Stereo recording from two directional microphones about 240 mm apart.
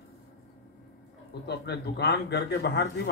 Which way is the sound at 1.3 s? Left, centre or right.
Left.